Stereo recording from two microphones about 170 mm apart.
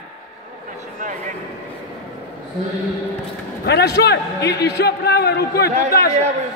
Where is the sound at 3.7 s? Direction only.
75° left (ahead or behind).